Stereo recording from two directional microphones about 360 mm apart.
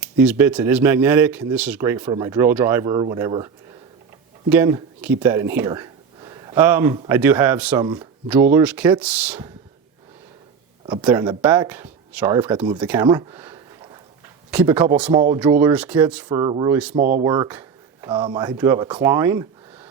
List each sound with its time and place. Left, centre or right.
0.0 s speech: centre
10.8 s speech: centre
16.9 s speech: right